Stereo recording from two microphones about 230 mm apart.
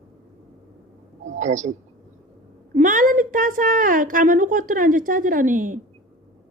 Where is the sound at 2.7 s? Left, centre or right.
Right.